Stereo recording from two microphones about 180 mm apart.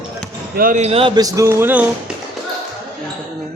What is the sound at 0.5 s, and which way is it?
Speech, 50° right (ahead or behind).